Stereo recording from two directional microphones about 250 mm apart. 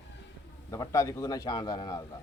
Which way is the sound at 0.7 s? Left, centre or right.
Centre.